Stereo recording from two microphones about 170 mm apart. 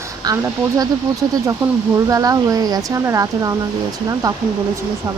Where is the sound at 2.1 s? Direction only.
20° right (ahead or behind).